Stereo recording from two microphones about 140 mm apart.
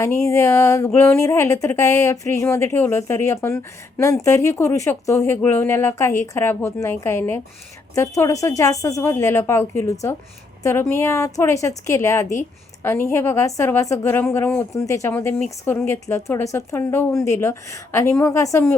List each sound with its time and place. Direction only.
0.0 s a woman's voice: 20° left (ahead or behind)